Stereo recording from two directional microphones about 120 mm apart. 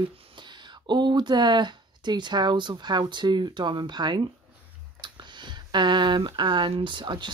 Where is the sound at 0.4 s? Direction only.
40° right (ahead or behind).